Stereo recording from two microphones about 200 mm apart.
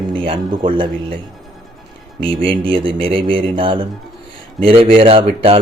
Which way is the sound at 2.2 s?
25° right (ahead or behind).